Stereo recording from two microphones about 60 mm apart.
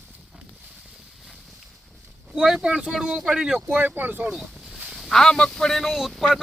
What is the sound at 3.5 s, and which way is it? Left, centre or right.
Speech, right.